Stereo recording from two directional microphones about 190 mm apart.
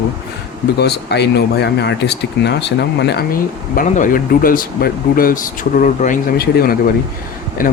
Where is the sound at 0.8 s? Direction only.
60° left (ahead or behind).